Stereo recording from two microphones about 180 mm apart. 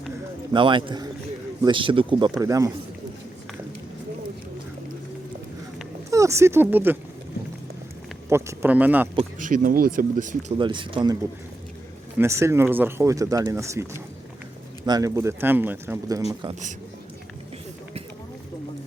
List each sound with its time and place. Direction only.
0.5 s a man's voice: 25° right (ahead or behind)
6.1 s speech: 15° right (ahead or behind)
8.3 s speech: 15° right (ahead or behind)
9.4 s speech: 50° right (ahead or behind)
10.6 s a man's voice: 25° right (ahead or behind)
12.2 s speech: 15° right (ahead or behind)
16.3 s a man's voice: 25° right (ahead or behind)